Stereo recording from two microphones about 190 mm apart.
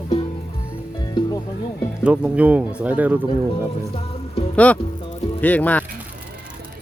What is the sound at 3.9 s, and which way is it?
Music, 30° left (ahead or behind).